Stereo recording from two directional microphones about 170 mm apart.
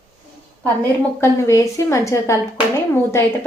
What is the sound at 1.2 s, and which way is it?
A woman's voice, 15° left (ahead or behind).